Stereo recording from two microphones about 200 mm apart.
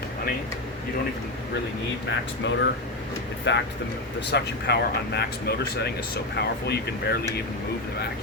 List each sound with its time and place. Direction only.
2.0 s speech: 65° left (ahead or behind)